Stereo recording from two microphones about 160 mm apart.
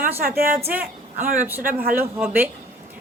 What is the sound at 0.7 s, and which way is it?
A woman's voice, 10° right (ahead or behind).